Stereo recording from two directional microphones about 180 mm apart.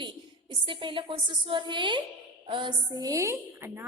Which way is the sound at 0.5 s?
30° right (ahead or behind).